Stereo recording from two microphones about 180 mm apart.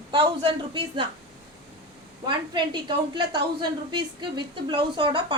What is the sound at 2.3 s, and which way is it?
A woman's voice, 25° right (ahead or behind).